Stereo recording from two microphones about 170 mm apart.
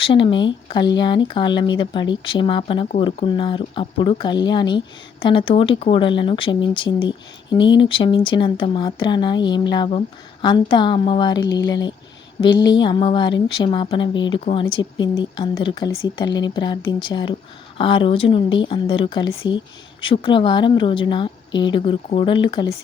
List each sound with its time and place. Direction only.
0.0 s speech: 30° left (ahead or behind)